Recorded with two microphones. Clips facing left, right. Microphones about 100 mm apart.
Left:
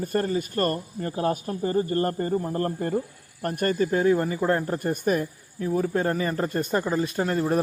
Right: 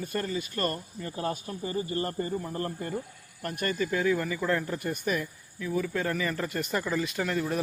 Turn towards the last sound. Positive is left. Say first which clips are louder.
# left 5 dB
turn(degrees=40)  # may be behind; listen again after turning